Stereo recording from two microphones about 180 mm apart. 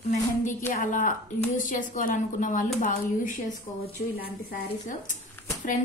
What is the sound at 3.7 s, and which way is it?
Speech, 10° left (ahead or behind).